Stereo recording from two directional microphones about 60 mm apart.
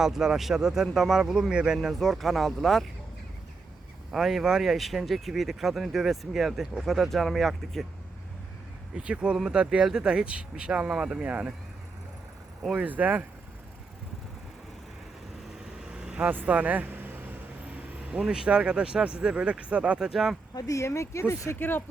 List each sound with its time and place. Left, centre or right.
0.0 s speech: centre
2.0 s speech: centre
4.1 s speech: centre
9.0 s speech: centre
12.7 s speech: right
15.9 s vehicle: centre; by 17.2 s right
18.3 s speech: centre
20.1 s speech: centre
20.6 s speech: left